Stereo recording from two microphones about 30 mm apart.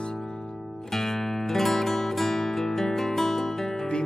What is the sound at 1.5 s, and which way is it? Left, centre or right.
Music, centre.